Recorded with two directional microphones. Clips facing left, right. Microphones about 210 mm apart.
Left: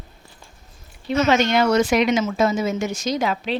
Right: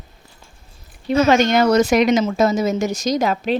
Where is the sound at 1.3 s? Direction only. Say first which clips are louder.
Right 3 dB; 45° right (ahead or behind).